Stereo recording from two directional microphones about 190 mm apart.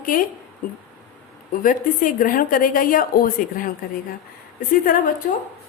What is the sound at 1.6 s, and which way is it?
A woman's voice, 45° left (ahead or behind).